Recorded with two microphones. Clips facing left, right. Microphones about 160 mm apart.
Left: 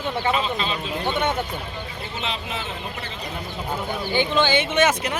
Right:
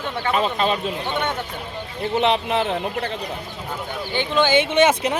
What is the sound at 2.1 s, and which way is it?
Speech, 60° right (ahead or behind).